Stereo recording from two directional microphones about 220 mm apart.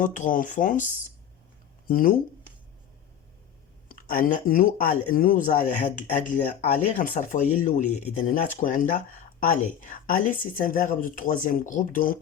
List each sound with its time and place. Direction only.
0.0 s speech: 35° left (ahead or behind)
1.9 s speech: 40° left (ahead or behind)
3.8 s speech: 40° left (ahead or behind)